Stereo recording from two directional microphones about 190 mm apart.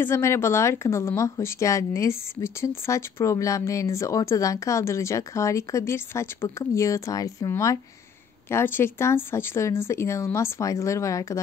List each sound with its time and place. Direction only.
0.0 s speech: 15° left (ahead or behind)